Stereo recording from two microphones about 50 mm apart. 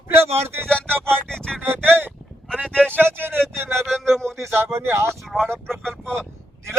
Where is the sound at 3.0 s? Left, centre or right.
Right.